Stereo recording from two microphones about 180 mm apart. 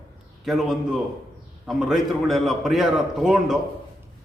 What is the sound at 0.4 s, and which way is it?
A man's voice, centre (ahead or behind).